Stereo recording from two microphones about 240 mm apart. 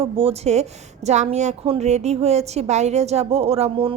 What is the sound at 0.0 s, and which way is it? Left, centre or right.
A woman's voice, right.